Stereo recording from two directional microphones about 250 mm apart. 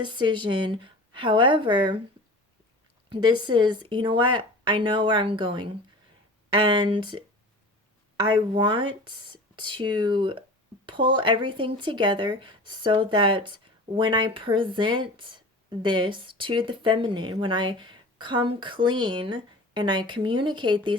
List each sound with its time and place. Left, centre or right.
0.0 s speech: centre
3.1 s speech: centre